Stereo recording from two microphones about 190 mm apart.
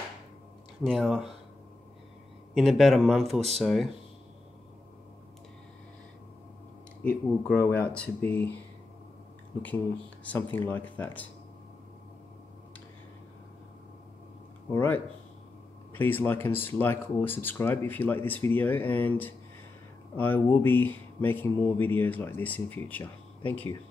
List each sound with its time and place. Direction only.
0.8 s speech: centre (ahead or behind)
2.5 s speech: centre (ahead or behind)
7.0 s speech: 5° left (ahead or behind)
10.2 s speech: 10° left (ahead or behind)
14.7 s speech: 10° left (ahead or behind)